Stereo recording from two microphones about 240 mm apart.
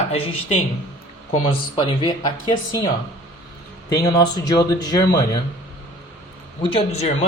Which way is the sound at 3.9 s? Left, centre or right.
Centre.